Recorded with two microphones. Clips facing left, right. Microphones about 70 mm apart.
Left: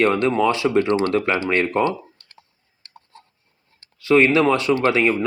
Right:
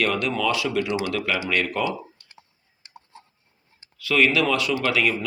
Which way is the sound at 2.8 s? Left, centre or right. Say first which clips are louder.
Even; centre.